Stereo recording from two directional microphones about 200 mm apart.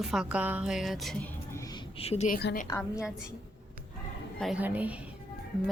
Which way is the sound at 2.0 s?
30° left (ahead or behind).